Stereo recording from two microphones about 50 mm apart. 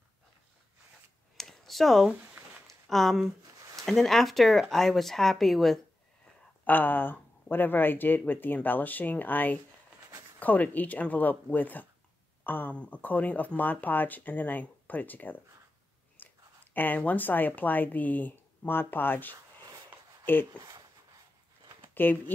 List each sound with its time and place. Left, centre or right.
1.3 s a sound: centre
2.9 s speech: centre
6.6 s speech: left
16.2 s a sound: left
16.7 s speech: left
21.9 s speech: left